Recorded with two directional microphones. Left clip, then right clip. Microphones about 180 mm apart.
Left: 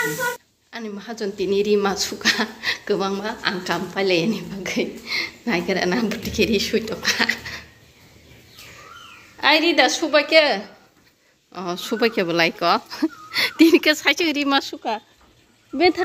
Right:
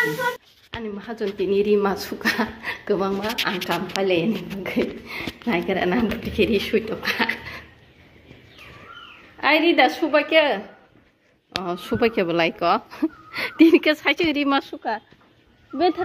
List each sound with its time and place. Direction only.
0.7 s a woman's voice: centre (ahead or behind)
3.6 s a woman's voice: 5° left (ahead or behind)
9.4 s a woman's voice: centre (ahead or behind)
11.6 s a woman's voice: centre (ahead or behind)
14.7 s speech: 15° left (ahead or behind)
15.7 s speech: 25° left (ahead or behind)